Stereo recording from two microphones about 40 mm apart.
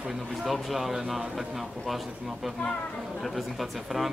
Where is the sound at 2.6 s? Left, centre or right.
Centre.